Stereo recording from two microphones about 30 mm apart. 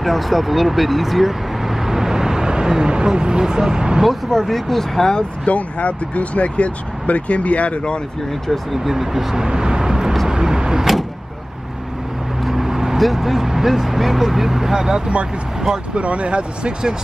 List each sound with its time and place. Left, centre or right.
0.0 s vehicle: centre; by 4.0 s right
4.4 s speech: centre
5.5 s speech: left
8.7 s speech: centre
9.4 s vehicle: right
12.4 s vehicle: centre
12.9 s speech: centre
15.9 s speech: right